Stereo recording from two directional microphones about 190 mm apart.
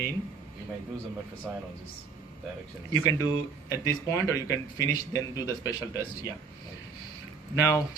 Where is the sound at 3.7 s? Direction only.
15° left (ahead or behind).